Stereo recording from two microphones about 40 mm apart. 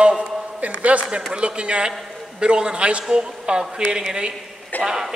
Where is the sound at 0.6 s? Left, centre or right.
Right.